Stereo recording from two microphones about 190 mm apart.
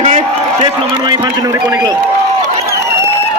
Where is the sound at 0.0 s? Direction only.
35° right (ahead or behind).